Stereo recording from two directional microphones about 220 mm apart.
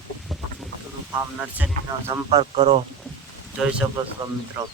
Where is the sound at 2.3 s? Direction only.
25° right (ahead or behind).